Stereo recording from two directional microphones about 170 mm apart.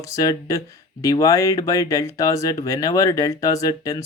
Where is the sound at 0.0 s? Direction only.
20° left (ahead or behind).